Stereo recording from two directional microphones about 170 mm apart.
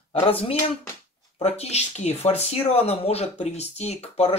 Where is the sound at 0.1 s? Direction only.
35° left (ahead or behind).